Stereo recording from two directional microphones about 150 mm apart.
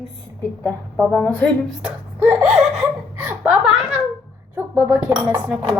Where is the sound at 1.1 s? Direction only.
10° left (ahead or behind).